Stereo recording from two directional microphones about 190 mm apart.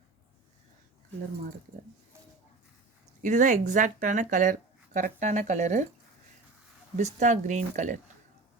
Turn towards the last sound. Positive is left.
turn(degrees=-40)  # may be behind; listen again after turning